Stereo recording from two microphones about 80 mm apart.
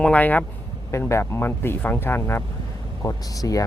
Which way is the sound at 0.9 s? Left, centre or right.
Left.